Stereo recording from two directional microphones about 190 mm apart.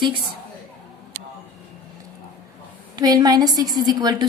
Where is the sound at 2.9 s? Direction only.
20° right (ahead or behind).